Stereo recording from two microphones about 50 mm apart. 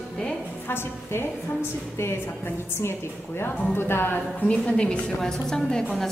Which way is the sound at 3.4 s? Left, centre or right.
Left.